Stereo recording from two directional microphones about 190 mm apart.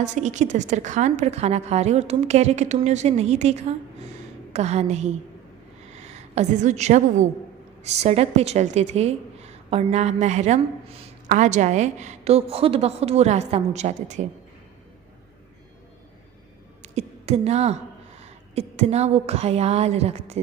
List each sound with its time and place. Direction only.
0.0 s a woman's voice: 40° right (ahead or behind)
16.8 s a sound: 35° right (ahead or behind)
18.2 s a woman's voice: 35° right (ahead or behind)